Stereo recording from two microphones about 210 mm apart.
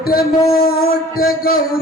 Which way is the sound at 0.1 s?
45° left (ahead or behind).